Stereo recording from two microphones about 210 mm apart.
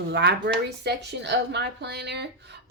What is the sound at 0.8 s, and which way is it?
A woman's voice, 55° right (ahead or behind).